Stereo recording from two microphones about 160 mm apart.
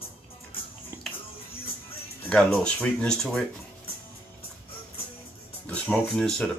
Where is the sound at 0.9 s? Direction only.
15° right (ahead or behind).